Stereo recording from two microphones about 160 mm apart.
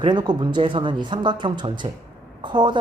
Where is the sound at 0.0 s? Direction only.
30° right (ahead or behind).